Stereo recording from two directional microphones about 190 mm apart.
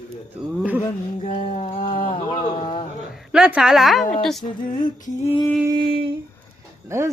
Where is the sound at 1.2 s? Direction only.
40° left (ahead or behind).